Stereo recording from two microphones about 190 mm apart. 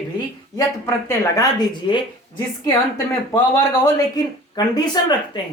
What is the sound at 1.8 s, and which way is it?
Speech, 25° left (ahead or behind).